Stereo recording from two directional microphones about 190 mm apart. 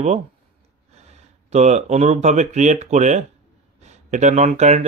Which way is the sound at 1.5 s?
35° right (ahead or behind).